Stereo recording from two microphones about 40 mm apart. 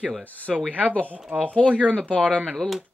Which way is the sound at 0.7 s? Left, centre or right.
Left.